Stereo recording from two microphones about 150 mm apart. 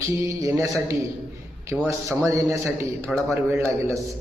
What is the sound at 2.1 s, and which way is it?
A man's voice, 20° right (ahead or behind).